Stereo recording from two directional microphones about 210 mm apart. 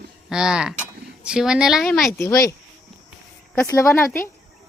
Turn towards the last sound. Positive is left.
turn(degrees=10)  # may be behind; listen again after turning